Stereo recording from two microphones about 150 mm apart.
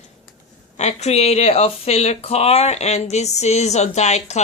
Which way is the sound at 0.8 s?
50° left (ahead or behind).